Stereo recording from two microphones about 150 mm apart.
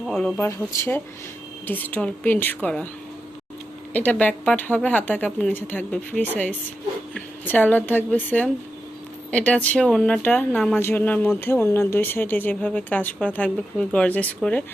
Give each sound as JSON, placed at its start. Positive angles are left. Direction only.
{"t": 0.1, "sound": "speech", "side_deg": 5}
{"t": 0.3, "sound": "speech", "side_deg": 15}
{"t": 3.9, "sound": "speech", "side_deg": 10}